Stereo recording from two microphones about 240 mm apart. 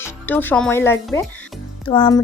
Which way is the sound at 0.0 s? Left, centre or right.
Centre.